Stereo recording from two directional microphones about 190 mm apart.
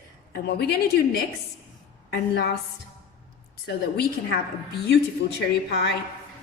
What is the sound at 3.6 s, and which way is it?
Speech, 60° left (ahead or behind).